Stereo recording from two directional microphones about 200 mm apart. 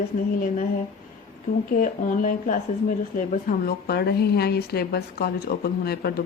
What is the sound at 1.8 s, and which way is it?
Speech, 40° left (ahead or behind).